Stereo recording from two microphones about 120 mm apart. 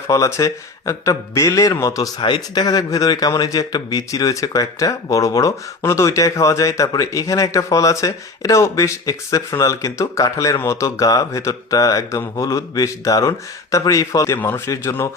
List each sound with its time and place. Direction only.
0.1 s speech: 25° left (ahead or behind)